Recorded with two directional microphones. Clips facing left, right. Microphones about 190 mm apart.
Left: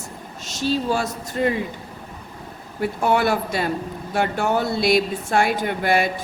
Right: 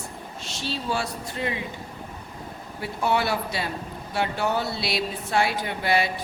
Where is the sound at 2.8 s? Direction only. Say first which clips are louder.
Left 5 dB; 50° left (ahead or behind).